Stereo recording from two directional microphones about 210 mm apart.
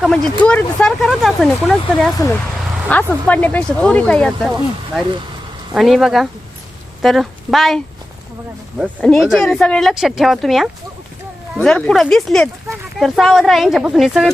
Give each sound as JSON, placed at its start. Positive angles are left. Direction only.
{"t": 0.0, "sound": "speech", "side_deg": 5}
{"t": 5.7, "sound": "a woman's voice", "side_deg": 0}
{"t": 9.0, "sound": "speech", "side_deg": 5}